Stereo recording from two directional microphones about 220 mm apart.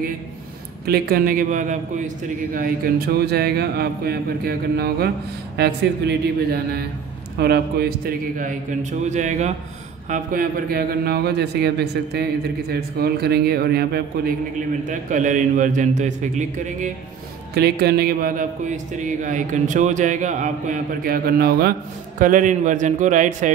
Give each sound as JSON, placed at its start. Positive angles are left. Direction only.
{"t": 0.8, "sound": "a man's voice", "side_deg": -45}
{"t": 14.9, "sound": "a man's voice", "side_deg": -35}
{"t": 17.6, "sound": "a man's voice", "side_deg": -45}